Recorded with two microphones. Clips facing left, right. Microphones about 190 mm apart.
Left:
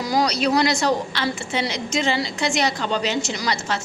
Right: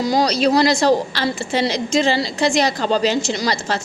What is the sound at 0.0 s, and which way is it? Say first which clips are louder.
A woman's voice: right 4 dB; 25° right (ahead or behind).